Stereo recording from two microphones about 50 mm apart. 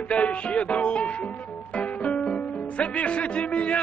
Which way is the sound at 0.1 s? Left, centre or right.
Left.